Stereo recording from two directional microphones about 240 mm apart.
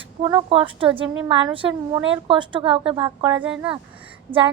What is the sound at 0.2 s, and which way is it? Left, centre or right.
A woman's voice, right.